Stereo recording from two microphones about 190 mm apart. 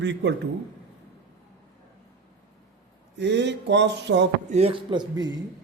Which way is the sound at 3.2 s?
65° right (ahead or behind).